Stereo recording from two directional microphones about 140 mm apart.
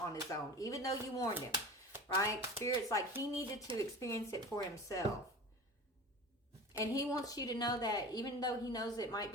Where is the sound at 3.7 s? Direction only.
40° right (ahead or behind).